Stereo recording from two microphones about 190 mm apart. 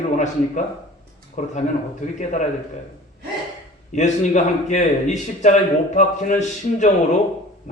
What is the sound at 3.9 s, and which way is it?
A man's voice, 40° left (ahead or behind).